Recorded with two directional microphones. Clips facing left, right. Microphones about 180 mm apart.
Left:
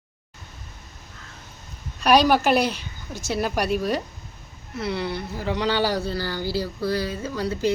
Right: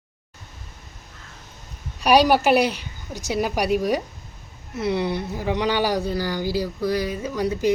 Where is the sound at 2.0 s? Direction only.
10° right (ahead or behind).